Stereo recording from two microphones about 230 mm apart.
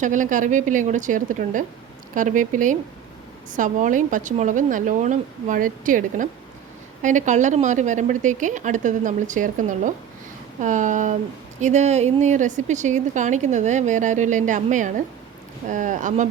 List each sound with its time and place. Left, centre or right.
0.0 s a woman's voice: right